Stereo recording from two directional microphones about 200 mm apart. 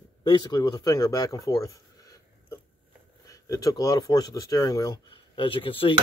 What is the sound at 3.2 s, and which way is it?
Speech, 15° left (ahead or behind).